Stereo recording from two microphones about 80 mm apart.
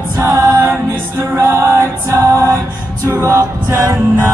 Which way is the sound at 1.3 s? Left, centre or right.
Right.